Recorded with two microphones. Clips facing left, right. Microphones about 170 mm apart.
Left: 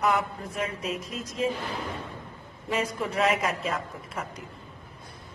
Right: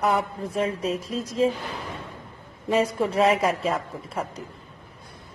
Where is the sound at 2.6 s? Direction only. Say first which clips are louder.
Right 7 dB; 30° right (ahead or behind).